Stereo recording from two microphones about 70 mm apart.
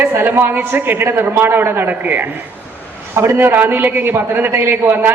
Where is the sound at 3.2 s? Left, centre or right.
Right.